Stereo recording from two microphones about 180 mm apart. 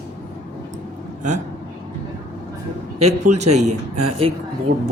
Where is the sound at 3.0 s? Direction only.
40° right (ahead or behind).